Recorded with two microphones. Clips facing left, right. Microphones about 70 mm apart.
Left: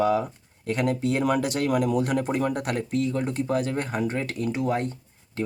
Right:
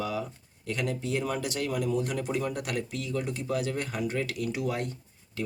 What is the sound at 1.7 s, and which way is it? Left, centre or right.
Speech, left.